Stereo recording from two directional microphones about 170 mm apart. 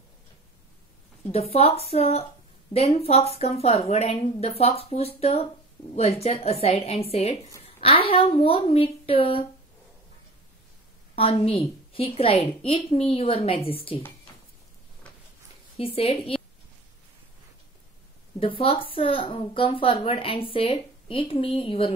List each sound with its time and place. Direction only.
1.3 s a woman's voice: 35° left (ahead or behind)
11.1 s a woman's voice: 35° left (ahead or behind)
15.8 s a woman's voice: 35° left (ahead or behind)
18.4 s a woman's voice: 30° left (ahead or behind)